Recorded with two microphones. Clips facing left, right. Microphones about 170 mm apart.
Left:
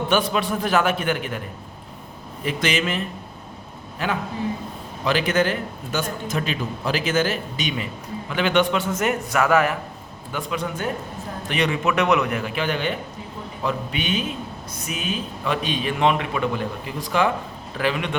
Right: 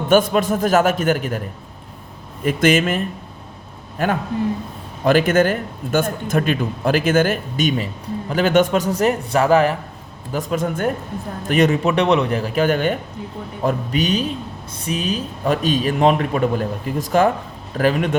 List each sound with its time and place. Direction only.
0.1 s speech: 45° right (ahead or behind)
2.4 s a man's voice: 50° right (ahead or behind); by 9.7 s 30° right (ahead or behind)
10.3 s speech: 45° right (ahead or behind)